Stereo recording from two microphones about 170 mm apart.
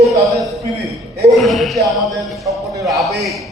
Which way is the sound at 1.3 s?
Centre (ahead or behind).